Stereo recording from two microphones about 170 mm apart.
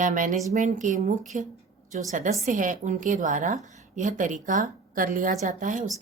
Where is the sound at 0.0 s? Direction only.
50° right (ahead or behind).